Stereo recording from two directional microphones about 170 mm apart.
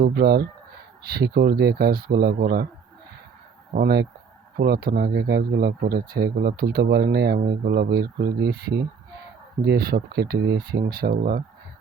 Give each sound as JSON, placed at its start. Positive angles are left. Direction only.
{"t": 0.0, "sound": "speech", "side_deg": -70}
{"t": 3.7, "sound": "speech", "side_deg": -65}